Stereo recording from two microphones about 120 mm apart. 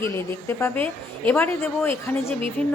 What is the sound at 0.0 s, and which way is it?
A woman's voice, 20° left (ahead or behind).